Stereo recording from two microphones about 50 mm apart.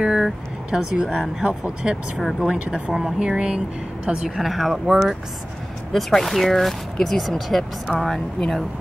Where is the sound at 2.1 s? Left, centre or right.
Centre.